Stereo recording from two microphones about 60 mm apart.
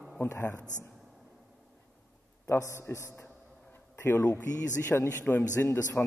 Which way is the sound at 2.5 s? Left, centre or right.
Left.